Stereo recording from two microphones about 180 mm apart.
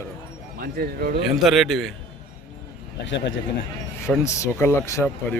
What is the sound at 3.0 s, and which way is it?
Speech, 85° left.